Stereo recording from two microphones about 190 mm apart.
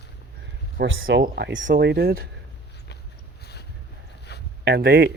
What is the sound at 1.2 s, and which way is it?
Speech, 60° right (ahead or behind).